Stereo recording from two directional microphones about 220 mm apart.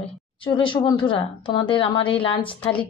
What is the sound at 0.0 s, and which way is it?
Speech, 20° left (ahead or behind).